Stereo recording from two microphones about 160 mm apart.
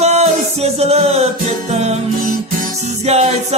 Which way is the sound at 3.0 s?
40° right (ahead or behind).